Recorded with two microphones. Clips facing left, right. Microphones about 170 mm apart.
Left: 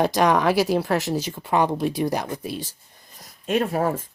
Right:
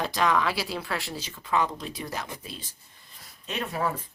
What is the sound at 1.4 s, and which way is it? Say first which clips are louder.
Speech: left 6 dB; 65° left (ahead or behind).